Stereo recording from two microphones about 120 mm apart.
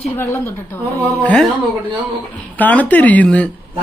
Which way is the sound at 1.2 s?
5° left (ahead or behind).